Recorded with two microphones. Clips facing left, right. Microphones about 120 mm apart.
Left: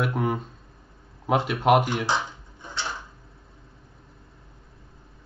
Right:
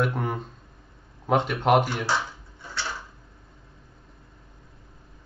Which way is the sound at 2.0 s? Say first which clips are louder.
Left 1 dB; 20° left (ahead or behind).